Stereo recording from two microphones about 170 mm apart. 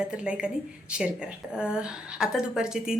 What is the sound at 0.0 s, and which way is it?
A woman's voice, 5° right (ahead or behind).